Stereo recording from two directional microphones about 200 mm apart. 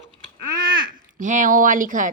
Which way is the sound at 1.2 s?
40° right (ahead or behind).